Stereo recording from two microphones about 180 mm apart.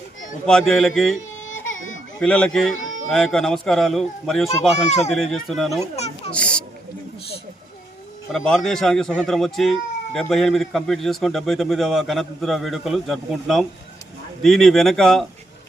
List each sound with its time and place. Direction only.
0.4 s speech: centre (ahead or behind)
1.7 s baby cry: 45° left (ahead or behind)
2.1 s speech: 5° left (ahead or behind)
4.9 s speech: 35° left (ahead or behind)
5.1 s speech: centre (ahead or behind)
6.3 s children playing: 5° left (ahead or behind)
8.3 s speech: centre (ahead or behind)